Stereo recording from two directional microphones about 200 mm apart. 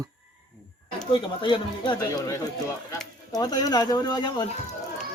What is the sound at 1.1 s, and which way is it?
Speech, 25° left (ahead or behind).